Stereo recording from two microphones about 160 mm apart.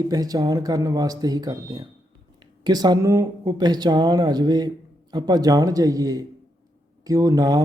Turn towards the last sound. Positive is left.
turn(degrees=-20)  # may be behind; listen again after turning